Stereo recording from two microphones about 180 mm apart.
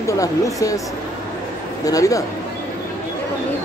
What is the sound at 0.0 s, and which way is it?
Speech, 20° left (ahead or behind).